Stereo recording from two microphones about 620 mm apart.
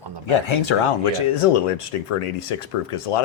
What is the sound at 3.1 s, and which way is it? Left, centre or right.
Speech, left.